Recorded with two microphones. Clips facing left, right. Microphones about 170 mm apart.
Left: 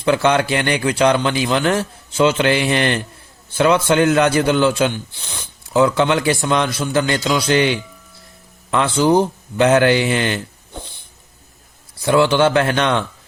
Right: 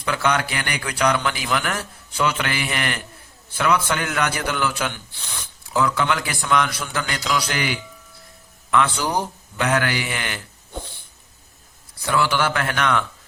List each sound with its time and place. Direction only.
0.0 s a man's voice: 30° left (ahead or behind)
12.0 s a man's voice: 25° left (ahead or behind)